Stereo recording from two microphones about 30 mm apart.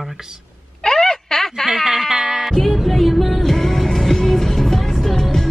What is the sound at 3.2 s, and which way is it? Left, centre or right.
Music, centre.